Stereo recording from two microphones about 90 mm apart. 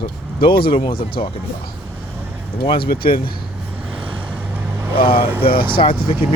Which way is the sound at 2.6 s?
70° left (ahead or behind).